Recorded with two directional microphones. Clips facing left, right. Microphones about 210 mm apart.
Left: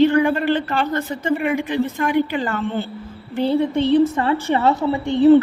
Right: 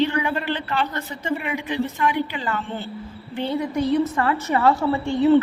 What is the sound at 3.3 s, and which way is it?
A woman's voice, 35° left (ahead or behind).